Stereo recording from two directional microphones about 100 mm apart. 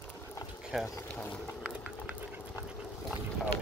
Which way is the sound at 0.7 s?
5° right (ahead or behind).